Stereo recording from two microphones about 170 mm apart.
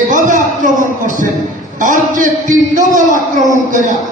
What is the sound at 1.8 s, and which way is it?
A man's voice, 50° right (ahead or behind).